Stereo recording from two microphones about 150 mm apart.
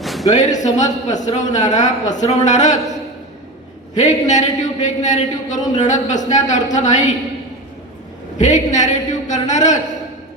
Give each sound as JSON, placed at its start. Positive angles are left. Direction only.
{"t": 0.0, "sound": "a sound", "side_deg": 0}
{"t": 0.3, "sound": "a woman's voice", "side_deg": 50}
{"t": 8.4, "sound": "a woman's voice", "side_deg": 55}